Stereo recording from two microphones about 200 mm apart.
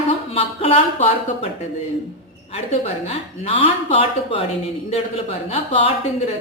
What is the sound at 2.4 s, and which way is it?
A woman's voice, 30° left (ahead or behind).